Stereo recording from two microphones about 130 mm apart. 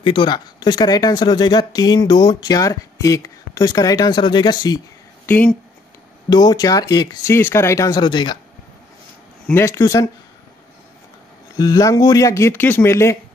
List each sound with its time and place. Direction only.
0.0 s speech: 35° left (ahead or behind)
5.2 s speech: 15° left (ahead or behind)
6.3 s speech: 30° left (ahead or behind)
9.7 s speech: 25° left (ahead or behind)
11.5 s speech: 30° left (ahead or behind)